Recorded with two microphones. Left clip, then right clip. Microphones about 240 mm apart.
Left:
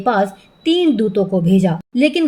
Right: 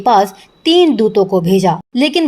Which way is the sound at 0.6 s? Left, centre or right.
Right.